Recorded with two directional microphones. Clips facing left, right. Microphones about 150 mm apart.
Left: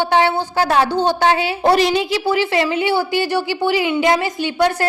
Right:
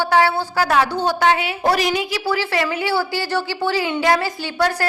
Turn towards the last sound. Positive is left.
turn(degrees=20)  # may be behind; listen again after turning